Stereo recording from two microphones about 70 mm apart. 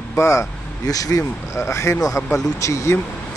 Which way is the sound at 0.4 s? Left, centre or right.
Left.